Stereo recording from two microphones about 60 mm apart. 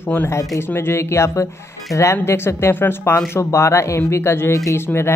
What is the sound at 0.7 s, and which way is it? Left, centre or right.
Speech, left.